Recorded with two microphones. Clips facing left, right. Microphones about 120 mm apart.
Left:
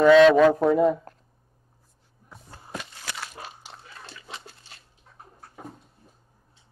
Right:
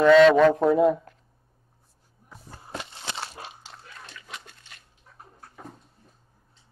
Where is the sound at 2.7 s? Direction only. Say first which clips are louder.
Right 1 dB; 25° right (ahead or behind).